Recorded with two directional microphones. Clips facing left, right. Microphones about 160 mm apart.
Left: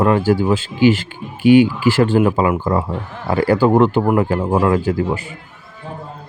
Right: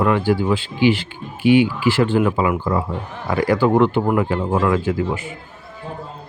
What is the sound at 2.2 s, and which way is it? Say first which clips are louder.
Speech: left 3 dB; 30° left (ahead or behind).